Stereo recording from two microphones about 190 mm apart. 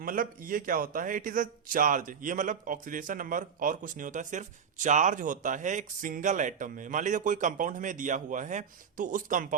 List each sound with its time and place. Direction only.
0.0 s a man's voice: 45° right (ahead or behind)